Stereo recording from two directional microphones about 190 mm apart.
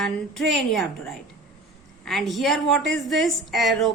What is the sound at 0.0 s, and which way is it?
A woman's voice, centre (ahead or behind).